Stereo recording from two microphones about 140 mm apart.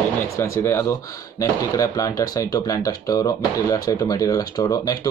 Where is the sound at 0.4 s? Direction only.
20° left (ahead or behind).